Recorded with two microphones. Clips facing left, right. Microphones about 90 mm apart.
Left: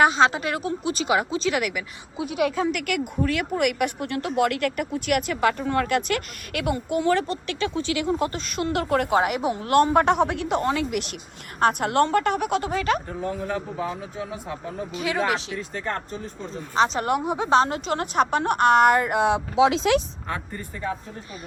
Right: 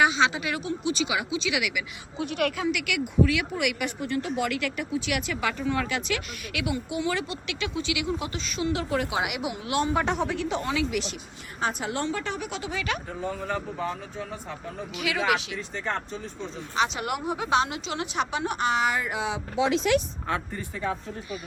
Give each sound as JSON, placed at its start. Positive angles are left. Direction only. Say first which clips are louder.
{"t": 0.0, "sound": "speech", "louder": "left 4 dB", "side_deg": 45}
{"t": 2.1, "sound": "a man's voice", "louder": "left 3 dB", "side_deg": 5}
{"t": 2.6, "sound": "speech", "louder": "left 3 dB", "side_deg": 45}
{"t": 11.6, "sound": "speech", "louder": "left 8 dB", "side_deg": 65}
{"t": 13.1, "sound": "a man's voice", "louder": "left 3 dB", "side_deg": 0}
{"t": 14.9, "sound": "speech", "louder": "left 3 dB", "side_deg": 30}
{"t": 15.5, "sound": "a man's voice", "louder": "left 2 dB", "side_deg": 5}
{"t": 16.7, "sound": "speech", "louder": "left 6 dB", "side_deg": 35}
{"t": 17.2, "sound": "a woman's voice", "louder": "left 4 dB", "side_deg": 25}
{"t": 17.6, "sound": "speech", "louder": "left 5 dB", "side_deg": 45}
{"t": 19.5, "sound": "speech", "louder": "left 3 dB", "side_deg": 90}